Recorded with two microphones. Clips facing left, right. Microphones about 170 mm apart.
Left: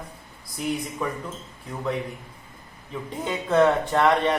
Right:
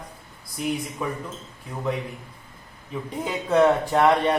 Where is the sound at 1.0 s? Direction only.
5° right (ahead or behind).